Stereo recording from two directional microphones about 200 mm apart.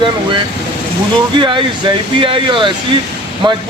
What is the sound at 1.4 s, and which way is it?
A man's voice, 25° right (ahead or behind).